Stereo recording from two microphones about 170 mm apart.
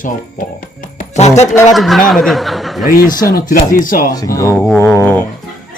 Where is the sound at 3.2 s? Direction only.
60° left (ahead or behind).